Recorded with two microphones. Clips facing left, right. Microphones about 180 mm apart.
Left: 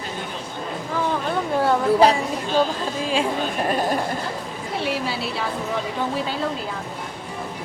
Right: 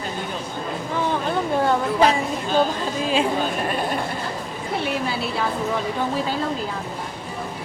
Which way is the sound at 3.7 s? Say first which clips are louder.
Left 3 dB; 40° left (ahead or behind).